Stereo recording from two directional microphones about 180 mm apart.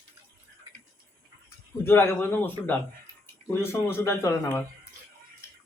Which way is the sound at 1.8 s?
10° left (ahead or behind).